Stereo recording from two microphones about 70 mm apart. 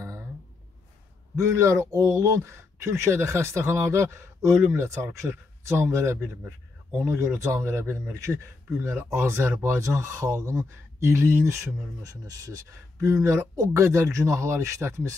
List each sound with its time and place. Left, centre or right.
1.3 s speech: right
12.0 s speech: right